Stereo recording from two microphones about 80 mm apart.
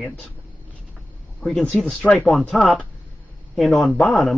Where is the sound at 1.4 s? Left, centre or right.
Centre.